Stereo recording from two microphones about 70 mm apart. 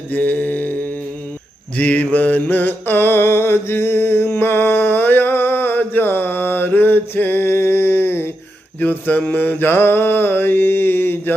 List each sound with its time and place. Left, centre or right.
0.1 s mantra: left